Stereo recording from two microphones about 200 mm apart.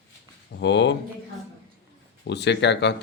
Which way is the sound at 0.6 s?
60° left (ahead or behind).